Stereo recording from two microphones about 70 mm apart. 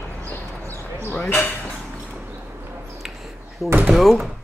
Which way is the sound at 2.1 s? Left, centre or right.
Right.